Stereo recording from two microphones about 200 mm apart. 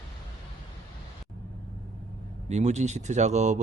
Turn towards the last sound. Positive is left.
turn(degrees=-35)  # may be behind; listen again after turning